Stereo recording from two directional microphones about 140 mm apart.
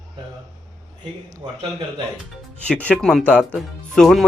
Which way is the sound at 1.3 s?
25° right (ahead or behind).